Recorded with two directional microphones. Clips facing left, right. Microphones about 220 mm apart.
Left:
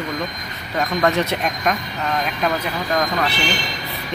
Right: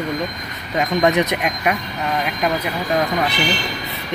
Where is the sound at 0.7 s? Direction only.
15° right (ahead or behind).